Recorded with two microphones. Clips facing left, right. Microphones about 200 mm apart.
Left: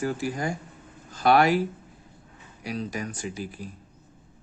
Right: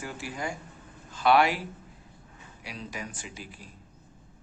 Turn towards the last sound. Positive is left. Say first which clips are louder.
# left 8 dB
turn(degrees=40)  # may be behind; listen again after turning